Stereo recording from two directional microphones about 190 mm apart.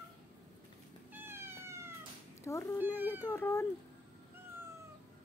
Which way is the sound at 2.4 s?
15° left (ahead or behind).